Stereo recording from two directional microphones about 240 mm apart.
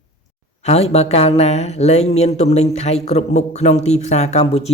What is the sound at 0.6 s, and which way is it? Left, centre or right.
Speech, left.